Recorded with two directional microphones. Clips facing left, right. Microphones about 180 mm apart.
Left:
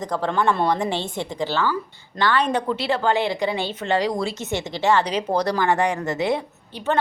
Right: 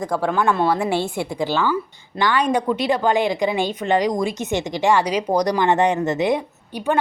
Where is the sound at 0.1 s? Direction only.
10° right (ahead or behind).